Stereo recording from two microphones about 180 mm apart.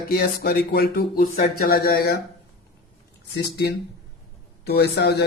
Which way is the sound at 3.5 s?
65° left (ahead or behind).